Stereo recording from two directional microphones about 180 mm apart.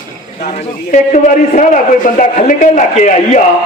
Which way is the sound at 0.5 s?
45° left (ahead or behind).